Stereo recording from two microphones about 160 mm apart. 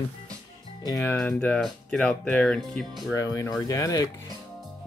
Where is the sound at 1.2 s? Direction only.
5° left (ahead or behind).